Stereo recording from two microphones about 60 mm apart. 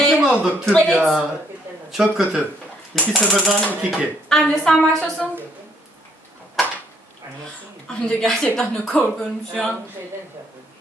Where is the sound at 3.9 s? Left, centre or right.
Centre.